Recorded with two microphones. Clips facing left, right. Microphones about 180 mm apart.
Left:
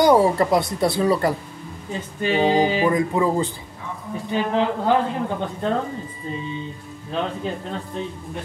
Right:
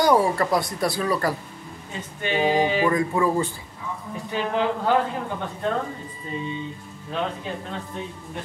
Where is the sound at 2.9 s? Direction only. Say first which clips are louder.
Left 2 dB; 20° left (ahead or behind).